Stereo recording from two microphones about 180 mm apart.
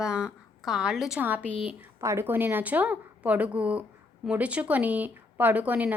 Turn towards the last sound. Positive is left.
turn(degrees=-10)  # may be behind; listen again after turning